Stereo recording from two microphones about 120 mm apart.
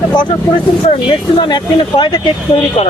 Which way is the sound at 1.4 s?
40° left (ahead or behind).